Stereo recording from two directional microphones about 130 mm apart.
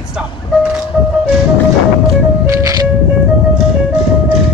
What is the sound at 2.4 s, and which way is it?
Music, 25° right (ahead or behind).